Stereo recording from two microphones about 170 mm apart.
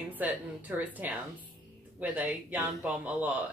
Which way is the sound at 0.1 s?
10° right (ahead or behind).